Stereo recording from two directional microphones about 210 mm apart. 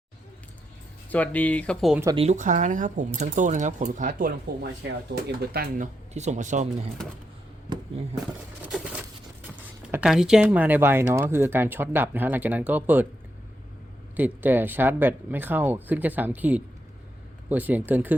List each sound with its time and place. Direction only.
1.1 s speech: 5° left (ahead or behind)
2.1 s speech: 30° right (ahead or behind)
9.9 s speech: 5° right (ahead or behind)
14.2 s speech: 10° right (ahead or behind)